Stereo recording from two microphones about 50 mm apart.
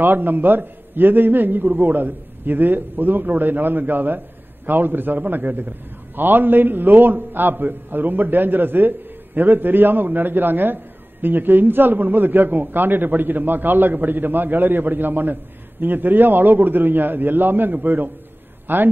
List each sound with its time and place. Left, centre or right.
0.0 s a man's voice: right